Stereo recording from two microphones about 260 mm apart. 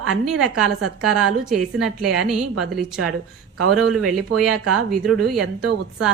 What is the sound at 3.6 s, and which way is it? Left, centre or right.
A woman's voice, right.